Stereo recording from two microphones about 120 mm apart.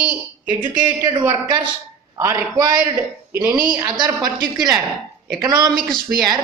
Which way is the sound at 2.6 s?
35° right (ahead or behind).